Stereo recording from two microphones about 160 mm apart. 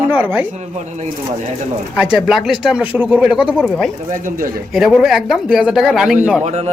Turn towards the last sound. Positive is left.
turn(degrees=-5)  # may be behind; listen again after turning